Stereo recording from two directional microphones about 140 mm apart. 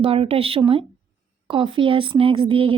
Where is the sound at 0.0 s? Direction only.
45° right (ahead or behind).